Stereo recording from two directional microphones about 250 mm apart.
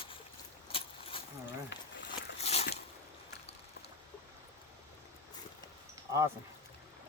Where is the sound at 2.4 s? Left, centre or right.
Left.